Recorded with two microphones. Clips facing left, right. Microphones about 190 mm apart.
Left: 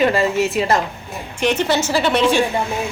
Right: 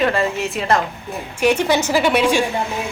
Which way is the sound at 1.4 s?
10° right (ahead or behind).